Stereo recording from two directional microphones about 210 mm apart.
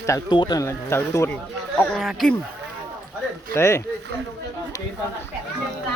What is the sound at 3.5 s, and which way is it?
Speech, 15° left (ahead or behind).